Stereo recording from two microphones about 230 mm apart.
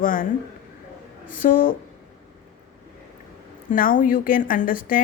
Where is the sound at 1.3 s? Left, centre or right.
Left.